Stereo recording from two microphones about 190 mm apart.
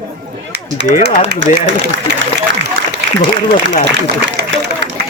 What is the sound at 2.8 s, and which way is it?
Speech, 75° right (ahead or behind).